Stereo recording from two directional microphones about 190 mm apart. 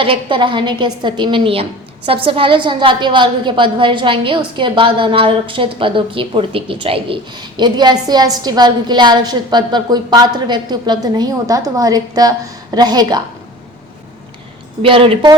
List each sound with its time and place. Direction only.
0.0 s a woman's voice: 25° right (ahead or behind)
14.8 s a woman's voice: 30° right (ahead or behind)